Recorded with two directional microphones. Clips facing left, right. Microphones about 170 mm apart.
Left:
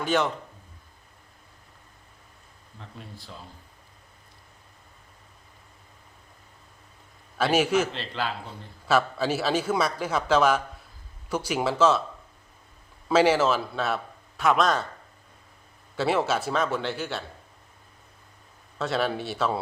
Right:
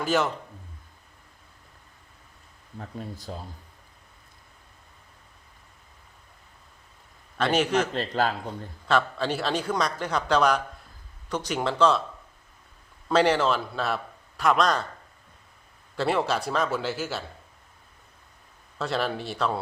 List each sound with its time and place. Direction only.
0.0 s a man's voice: centre (ahead or behind)
2.7 s speech: 45° right (ahead or behind)
7.3 s speech: 5° left (ahead or behind)
7.9 s speech: 45° right (ahead or behind)
8.9 s a man's voice: 5° left (ahead or behind)
13.1 s a man's voice: 5° left (ahead or behind)
16.0 s a man's voice: centre (ahead or behind)
18.8 s a man's voice: centre (ahead or behind)